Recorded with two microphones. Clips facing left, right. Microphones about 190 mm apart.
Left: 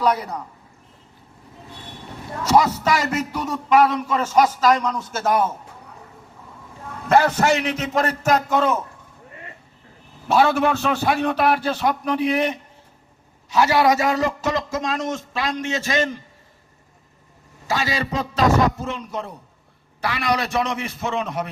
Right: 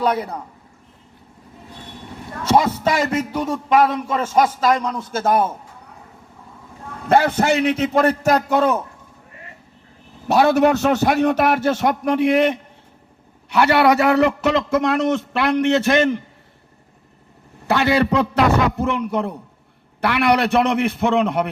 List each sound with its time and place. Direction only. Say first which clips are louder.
0.0 s a man's voice: right 1 dB; 30° right (ahead or behind)
2.4 s a man's voice: right 1 dB; 30° right (ahead or behind)
7.1 s a man's voice: right 1 dB; 30° right (ahead or behind)
10.2 s a man's voice: right 3 dB; 40° right (ahead or behind); by 16.2 s 60° right (ahead or behind)
17.7 s a man's voice: right 7 dB; 60° right (ahead or behind)